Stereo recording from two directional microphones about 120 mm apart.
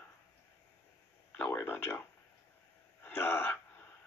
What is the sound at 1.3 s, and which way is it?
Speech, 15° left (ahead or behind).